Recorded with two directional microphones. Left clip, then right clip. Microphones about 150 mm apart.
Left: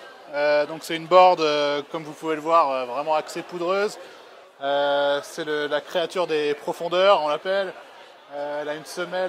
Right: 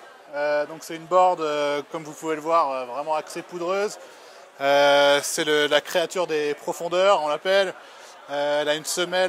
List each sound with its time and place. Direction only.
0.3 s a man's voice: centre (ahead or behind)
1.6 s a man's voice: 10° right (ahead or behind)
4.6 s speech: 25° right (ahead or behind)
7.4 s speech: 30° right (ahead or behind)